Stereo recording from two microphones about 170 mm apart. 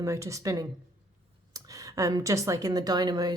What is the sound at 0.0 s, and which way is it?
A woman's voice, 20° right (ahead or behind).